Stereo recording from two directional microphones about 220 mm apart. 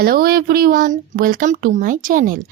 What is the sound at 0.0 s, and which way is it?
Speech, 40° right (ahead or behind).